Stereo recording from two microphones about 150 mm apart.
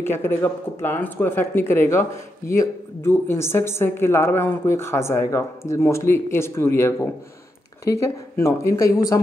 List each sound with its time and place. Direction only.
0.0 s speech: 15° left (ahead or behind)